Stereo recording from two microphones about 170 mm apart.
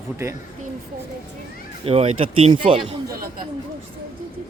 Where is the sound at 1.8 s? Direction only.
35° right (ahead or behind).